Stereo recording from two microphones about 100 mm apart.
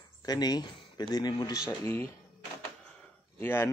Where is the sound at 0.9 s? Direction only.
45° left (ahead or behind).